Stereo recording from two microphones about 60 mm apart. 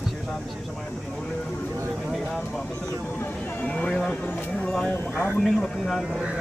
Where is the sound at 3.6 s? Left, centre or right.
Centre.